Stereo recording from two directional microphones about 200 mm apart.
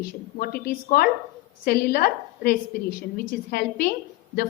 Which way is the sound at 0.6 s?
50° left (ahead or behind).